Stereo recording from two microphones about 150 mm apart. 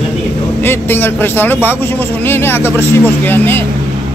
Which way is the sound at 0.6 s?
15° left (ahead or behind).